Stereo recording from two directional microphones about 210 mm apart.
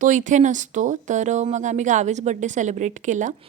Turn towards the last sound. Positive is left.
turn(degrees=-35)  # may be behind; listen again after turning